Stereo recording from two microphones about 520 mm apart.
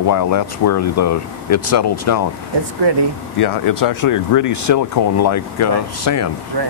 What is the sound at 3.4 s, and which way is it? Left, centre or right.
Speech, left.